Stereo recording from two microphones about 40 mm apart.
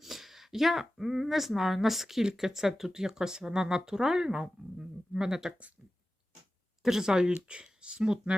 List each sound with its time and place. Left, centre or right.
0.0 s speech: centre
6.8 s speech: centre